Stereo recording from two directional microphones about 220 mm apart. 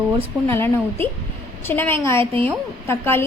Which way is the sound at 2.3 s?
25° right (ahead or behind).